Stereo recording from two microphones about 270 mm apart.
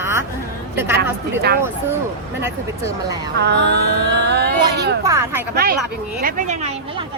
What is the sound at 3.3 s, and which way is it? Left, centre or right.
Speech, right.